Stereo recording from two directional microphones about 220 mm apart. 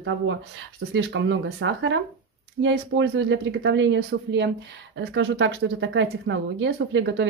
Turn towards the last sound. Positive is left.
turn(degrees=-55)  # may be behind; listen again after turning